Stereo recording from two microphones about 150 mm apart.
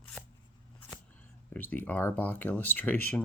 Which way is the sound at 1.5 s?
10° left (ahead or behind).